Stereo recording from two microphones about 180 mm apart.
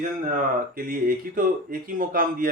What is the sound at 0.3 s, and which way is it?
Speech, 50° right (ahead or behind).